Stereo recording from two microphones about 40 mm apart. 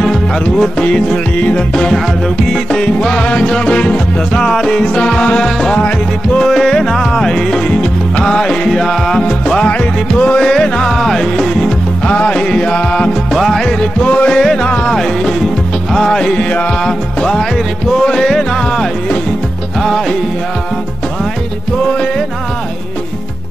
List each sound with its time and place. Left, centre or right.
0.0 s music: centre
1.4 s music: left
2.4 s music: centre
4.3 s music: centre
6.4 s music: centre
9.7 s music: left
10.4 s music: centre
10.9 s music: centre; by 13.1 s left
13.3 s music: centre
13.7 s music: left
14.9 s music: centre
16.3 s music: left
16.8 s music: centre